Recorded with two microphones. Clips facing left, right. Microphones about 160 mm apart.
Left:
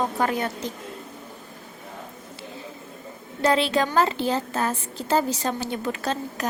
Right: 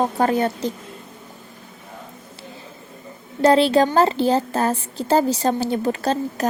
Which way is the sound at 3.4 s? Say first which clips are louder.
Right 7 dB; 35° right (ahead or behind).